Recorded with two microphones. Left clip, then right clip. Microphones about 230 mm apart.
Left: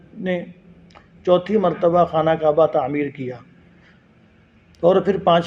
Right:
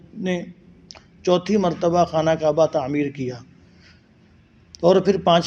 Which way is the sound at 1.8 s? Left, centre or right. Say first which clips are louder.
Left 2 dB; right.